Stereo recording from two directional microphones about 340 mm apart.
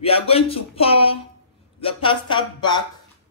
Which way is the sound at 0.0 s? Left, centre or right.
Centre.